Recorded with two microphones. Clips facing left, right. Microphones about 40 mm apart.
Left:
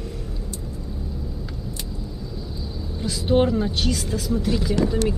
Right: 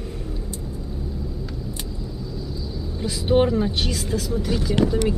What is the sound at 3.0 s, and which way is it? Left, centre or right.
Speech, centre.